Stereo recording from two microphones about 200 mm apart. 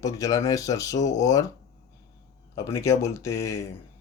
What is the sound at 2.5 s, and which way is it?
Speech, 15° left (ahead or behind).